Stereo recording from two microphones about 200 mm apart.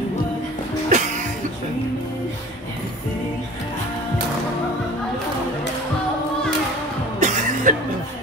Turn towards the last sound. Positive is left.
turn(degrees=-40)  # may be behind; listen again after turning